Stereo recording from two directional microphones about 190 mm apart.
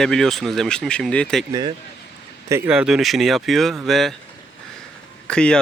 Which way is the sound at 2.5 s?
10° right (ahead or behind).